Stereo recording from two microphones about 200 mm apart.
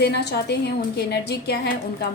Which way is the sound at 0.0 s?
55° left (ahead or behind).